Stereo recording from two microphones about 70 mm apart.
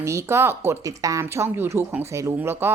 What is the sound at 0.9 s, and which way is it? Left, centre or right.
Speech, right.